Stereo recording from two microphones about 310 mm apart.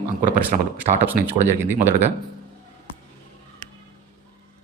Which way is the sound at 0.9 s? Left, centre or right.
Centre.